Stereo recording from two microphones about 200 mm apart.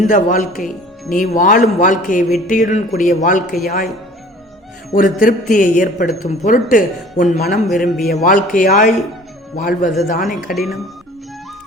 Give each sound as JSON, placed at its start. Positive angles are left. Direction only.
{"t": 0.0, "sound": "a man's voice", "side_deg": 40}
{"t": 4.9, "sound": "a man's voice", "side_deg": 40}
{"t": 7.7, "sound": "a man's voice", "side_deg": 0}
{"t": 8.1, "sound": "a man's voice", "side_deg": 40}